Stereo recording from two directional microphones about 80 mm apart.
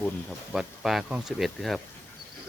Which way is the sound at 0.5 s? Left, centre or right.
Centre.